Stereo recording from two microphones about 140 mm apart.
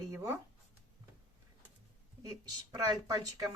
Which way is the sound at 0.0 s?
20° right (ahead or behind).